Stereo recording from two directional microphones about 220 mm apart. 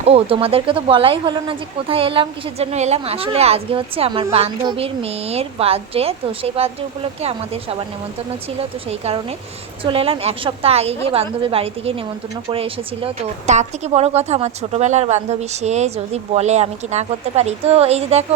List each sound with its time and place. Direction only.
0.0 s speech: 25° right (ahead or behind)
8.9 s speech: 30° right (ahead or behind)